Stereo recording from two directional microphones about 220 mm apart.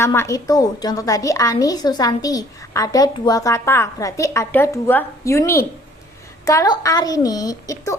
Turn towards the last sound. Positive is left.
turn(degrees=15)  # may be behind; listen again after turning